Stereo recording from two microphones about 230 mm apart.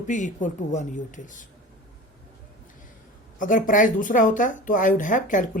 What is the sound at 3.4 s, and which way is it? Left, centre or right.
Speech, left.